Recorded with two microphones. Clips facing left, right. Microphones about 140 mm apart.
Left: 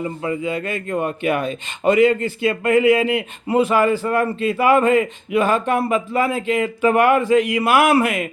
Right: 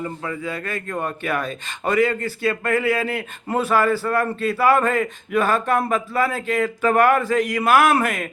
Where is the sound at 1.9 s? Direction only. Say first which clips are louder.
Left 4 dB; 45° right (ahead or behind).